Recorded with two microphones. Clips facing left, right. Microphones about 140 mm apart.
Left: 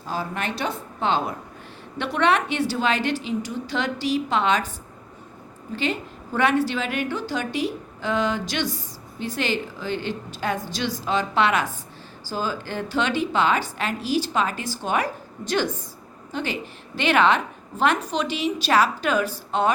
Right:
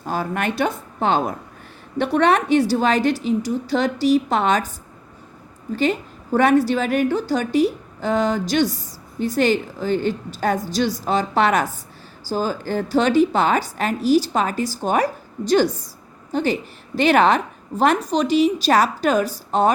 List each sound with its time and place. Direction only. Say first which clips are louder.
0.0 s a woman's voice: right 5 dB; 55° right (ahead or behind)
5.7 s a woman's voice: right 6 dB; 45° right (ahead or behind)